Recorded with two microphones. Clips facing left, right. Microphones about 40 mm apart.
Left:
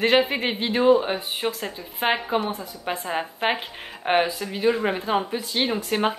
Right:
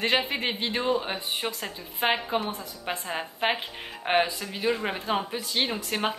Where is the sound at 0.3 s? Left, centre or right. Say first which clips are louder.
Left 4 dB; centre.